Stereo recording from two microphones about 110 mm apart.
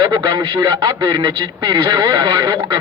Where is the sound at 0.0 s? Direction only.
40° right (ahead or behind).